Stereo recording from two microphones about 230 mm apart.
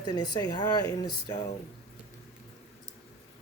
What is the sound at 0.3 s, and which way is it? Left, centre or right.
Speech, centre.